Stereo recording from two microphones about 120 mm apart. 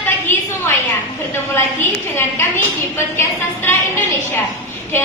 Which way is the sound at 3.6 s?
20° left (ahead or behind).